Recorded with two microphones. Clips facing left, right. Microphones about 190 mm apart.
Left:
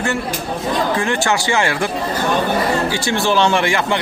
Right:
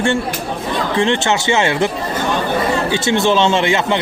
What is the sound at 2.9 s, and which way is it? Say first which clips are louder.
A man's voice: right 3 dB; 20° right (ahead or behind).